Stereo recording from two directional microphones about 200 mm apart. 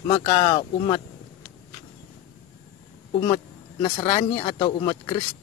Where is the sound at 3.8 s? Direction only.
20° left (ahead or behind).